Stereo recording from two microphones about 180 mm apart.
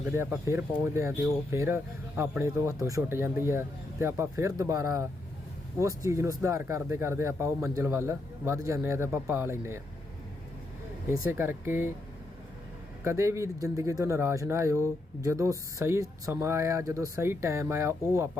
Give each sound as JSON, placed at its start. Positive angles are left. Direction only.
{"t": 0.2, "sound": "speech", "side_deg": -15}
{"t": 11.1, "sound": "speech", "side_deg": -15}
{"t": 13.1, "sound": "speech", "side_deg": -15}